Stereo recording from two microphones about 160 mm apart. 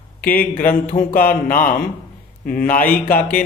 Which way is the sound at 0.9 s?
60° left (ahead or behind).